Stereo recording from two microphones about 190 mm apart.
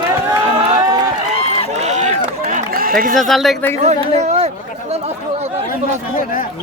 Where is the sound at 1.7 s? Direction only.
40° right (ahead or behind).